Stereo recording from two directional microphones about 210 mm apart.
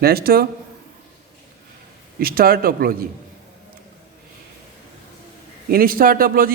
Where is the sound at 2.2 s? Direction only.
45° right (ahead or behind).